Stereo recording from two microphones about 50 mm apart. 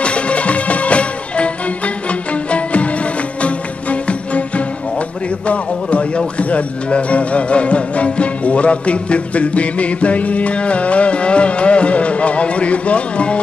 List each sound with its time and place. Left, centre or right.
0.0 s music: left
2.5 s music: left
5.5 s speech: left